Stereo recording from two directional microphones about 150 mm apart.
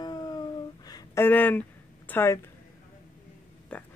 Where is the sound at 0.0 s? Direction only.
25° left (ahead or behind).